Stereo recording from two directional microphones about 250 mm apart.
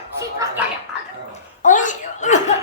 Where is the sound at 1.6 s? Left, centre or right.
Left.